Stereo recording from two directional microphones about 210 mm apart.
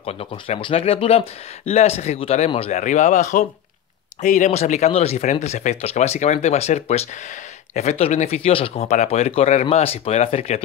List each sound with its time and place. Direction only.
0.0 s speech: 30° left (ahead or behind)